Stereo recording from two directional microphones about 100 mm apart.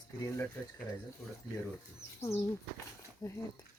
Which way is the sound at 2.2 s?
25° left (ahead or behind).